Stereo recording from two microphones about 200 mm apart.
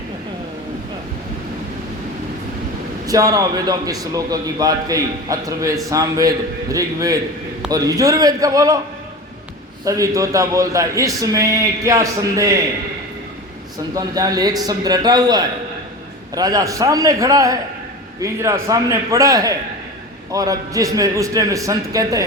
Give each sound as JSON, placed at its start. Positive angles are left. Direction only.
{"t": 3.1, "sound": "a man's voice", "side_deg": -15}
{"t": 9.8, "sound": "a man's voice", "side_deg": -15}
{"t": 13.9, "sound": "a man's voice", "side_deg": -20}